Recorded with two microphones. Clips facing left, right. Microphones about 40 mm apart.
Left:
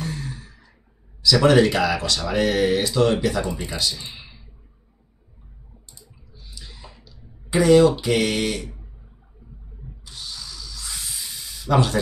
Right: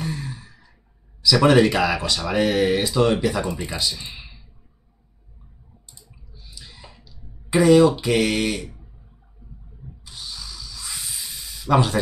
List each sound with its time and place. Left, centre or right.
0.0 s sigh: centre
1.2 s speech: centre
5.9 s a sound: centre
6.9 s clicking: centre
7.5 s speech: centre
10.0 s rub: centre